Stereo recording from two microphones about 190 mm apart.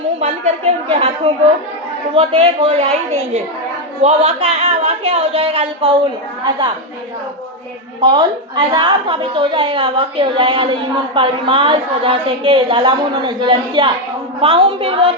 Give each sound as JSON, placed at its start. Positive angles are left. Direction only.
{"t": 0.2, "sound": "speech", "side_deg": -35}
{"t": 4.0, "sound": "speech", "side_deg": -30}
{"t": 8.0, "sound": "a woman's voice", "side_deg": -20}